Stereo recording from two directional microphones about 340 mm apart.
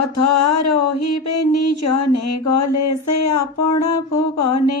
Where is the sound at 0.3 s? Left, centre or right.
Left.